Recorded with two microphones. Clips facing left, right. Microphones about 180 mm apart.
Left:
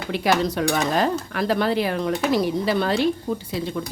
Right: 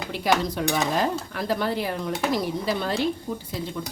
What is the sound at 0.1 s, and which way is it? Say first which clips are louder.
Speech: left 3 dB; 75° left (ahead or behind).